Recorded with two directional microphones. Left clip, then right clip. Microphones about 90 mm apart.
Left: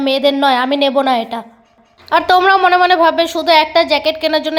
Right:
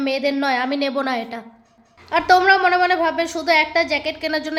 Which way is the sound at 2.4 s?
35° left (ahead or behind).